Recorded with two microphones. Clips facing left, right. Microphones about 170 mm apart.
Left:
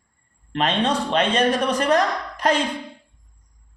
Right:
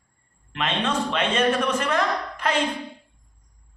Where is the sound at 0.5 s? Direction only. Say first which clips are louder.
Left 4 dB; 35° left (ahead or behind).